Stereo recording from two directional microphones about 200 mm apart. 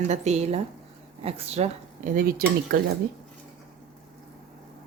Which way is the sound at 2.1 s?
45° right (ahead or behind).